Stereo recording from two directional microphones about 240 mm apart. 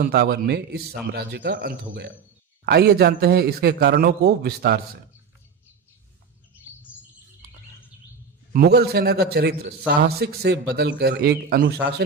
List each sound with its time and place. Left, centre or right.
0.0 s a man's voice: right
6.9 s bird: centre
8.5 s a man's voice: right